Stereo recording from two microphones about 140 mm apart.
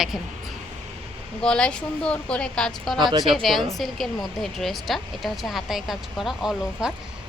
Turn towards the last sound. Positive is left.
turn(degrees=-5)  # may be behind; listen again after turning